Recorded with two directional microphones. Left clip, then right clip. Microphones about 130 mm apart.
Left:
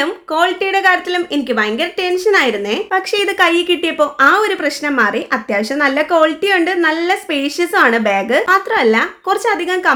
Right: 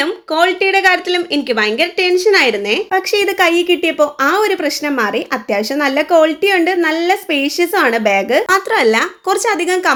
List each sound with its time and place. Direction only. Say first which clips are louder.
0.0 s speech: right 1 dB; 10° right (ahead or behind)
2.9 s speech: even; 25° right (ahead or behind)